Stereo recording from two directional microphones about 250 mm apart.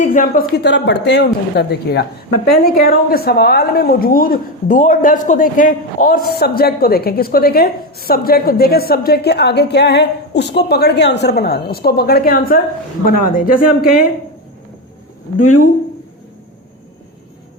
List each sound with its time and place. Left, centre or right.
0.0 s a woman's voice: left